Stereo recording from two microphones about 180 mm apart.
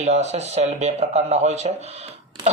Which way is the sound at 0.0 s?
40° right (ahead or behind).